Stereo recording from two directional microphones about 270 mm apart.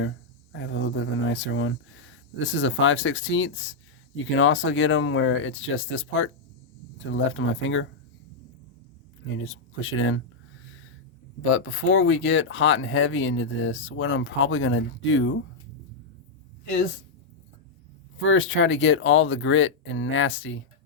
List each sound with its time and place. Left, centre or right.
0.6 s speech: left
9.2 s speech: left
11.4 s speech: left
18.2 s speech: left